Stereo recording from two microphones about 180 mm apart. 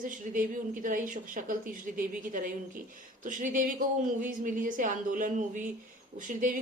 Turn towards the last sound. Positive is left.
turn(degrees=-45)  # may be behind; listen again after turning